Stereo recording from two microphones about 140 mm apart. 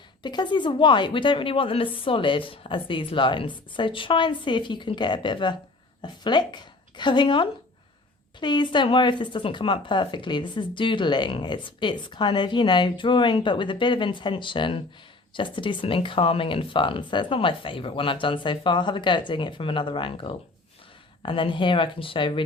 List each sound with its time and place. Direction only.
0.2 s speech: 35° left (ahead or behind)